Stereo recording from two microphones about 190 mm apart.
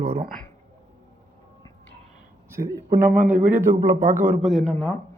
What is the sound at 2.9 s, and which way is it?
Speech, 50° right (ahead or behind).